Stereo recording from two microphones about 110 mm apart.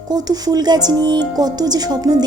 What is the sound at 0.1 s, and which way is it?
Speech, 35° right (ahead or behind).